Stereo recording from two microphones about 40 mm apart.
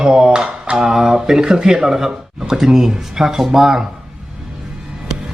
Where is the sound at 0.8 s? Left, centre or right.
Centre.